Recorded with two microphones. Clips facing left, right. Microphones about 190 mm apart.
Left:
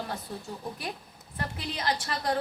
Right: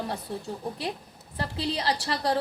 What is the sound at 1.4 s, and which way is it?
A woman's voice, 30° right (ahead or behind).